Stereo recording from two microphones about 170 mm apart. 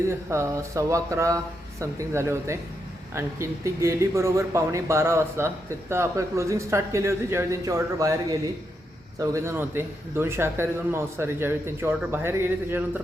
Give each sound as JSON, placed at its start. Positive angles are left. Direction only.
{"t": 0.1, "sound": "speech", "side_deg": -15}